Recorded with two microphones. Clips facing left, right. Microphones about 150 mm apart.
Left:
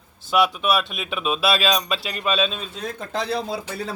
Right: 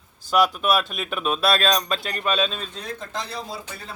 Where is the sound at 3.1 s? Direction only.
65° left (ahead or behind).